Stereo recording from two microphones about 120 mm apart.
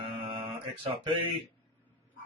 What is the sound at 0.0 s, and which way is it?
Mantra, 45° right (ahead or behind).